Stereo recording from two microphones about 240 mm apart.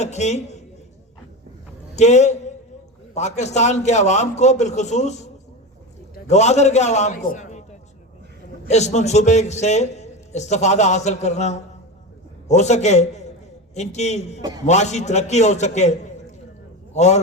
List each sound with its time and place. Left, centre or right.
0.0 s a man's voice: left
2.0 s a man's voice: left
8.6 s a man's voice: left